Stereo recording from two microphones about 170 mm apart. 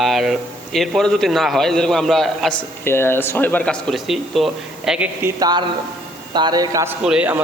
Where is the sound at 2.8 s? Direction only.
15° left (ahead or behind); by 5.0 s 5° right (ahead or behind).